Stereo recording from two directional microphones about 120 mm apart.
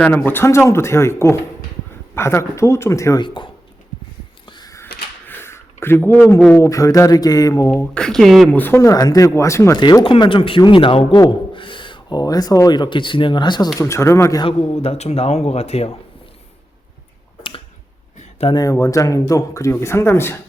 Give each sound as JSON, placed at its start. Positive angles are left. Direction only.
{"t": 0.0, "sound": "speech", "side_deg": 15}
{"t": 3.2, "sound": "speech", "side_deg": 40}
{"t": 4.4, "sound": "a sound", "side_deg": 35}
{"t": 5.3, "sound": "a sound", "side_deg": 20}
{"t": 6.5, "sound": "speech", "side_deg": 25}
{"t": 7.9, "sound": "speech", "side_deg": 5}
{"t": 8.5, "sound": "speech", "side_deg": 20}
{"t": 9.7, "sound": "speech", "side_deg": 40}
{"t": 13.7, "sound": "speech", "side_deg": 25}
{"t": 14.4, "sound": "speech", "side_deg": 55}
{"t": 18.5, "sound": "speech", "side_deg": 30}